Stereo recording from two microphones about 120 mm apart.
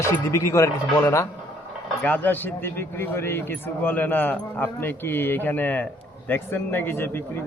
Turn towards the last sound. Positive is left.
turn(degrees=20)  # may be behind; listen again after turning